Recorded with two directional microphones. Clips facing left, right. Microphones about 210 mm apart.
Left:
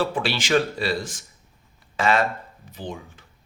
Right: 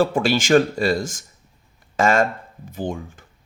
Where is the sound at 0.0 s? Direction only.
45° right (ahead or behind).